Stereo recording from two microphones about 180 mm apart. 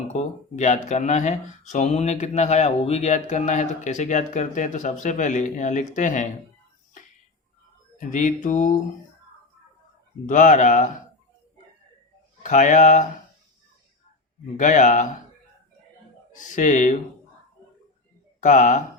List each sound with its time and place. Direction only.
0.1 s speech: 40° left (ahead or behind)
7.9 s mantra: 45° left (ahead or behind)
10.2 s mantra: 45° left (ahead or behind)
12.4 s mantra: 45° left (ahead or behind)
14.5 s mantra: 45° left (ahead or behind)
16.3 s mantra: 45° left (ahead or behind)
18.3 s speech: 45° left (ahead or behind)